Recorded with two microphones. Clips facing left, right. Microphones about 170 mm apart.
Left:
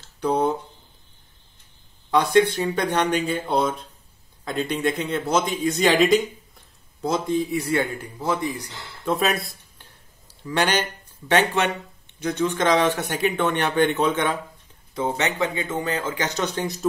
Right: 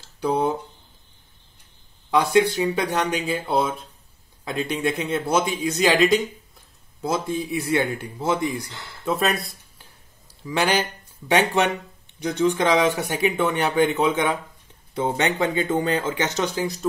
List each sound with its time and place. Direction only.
0.2 s speech: 10° right (ahead or behind)
2.0 s speech: 10° right (ahead or behind)
8.0 s speech: 25° right (ahead or behind)
9.0 s speech: centre (ahead or behind)
15.0 s speech: 30° right (ahead or behind)
16.5 s speech: centre (ahead or behind)